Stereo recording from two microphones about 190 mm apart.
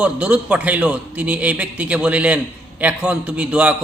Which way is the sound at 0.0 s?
5° right (ahead or behind).